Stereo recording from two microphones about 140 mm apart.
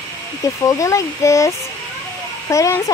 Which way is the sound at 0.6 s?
20° left (ahead or behind).